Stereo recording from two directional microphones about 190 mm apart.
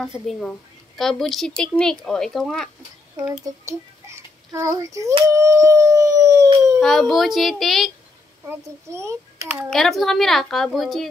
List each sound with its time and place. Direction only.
0.0 s a woman's voice: centre (ahead or behind)
3.4 s a child's voice: 15° right (ahead or behind)
5.3 s howl: 15° right (ahead or behind)
6.8 s a woman's voice: centre (ahead or behind)
8.5 s a child's voice: 15° right (ahead or behind)
9.7 s a woman's voice: centre (ahead or behind)